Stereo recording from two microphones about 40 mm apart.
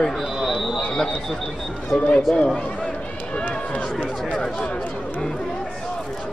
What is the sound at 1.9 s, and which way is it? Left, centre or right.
Speech, left.